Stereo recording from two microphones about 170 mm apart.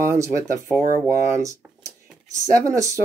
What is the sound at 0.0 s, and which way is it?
Speech, 15° right (ahead or behind).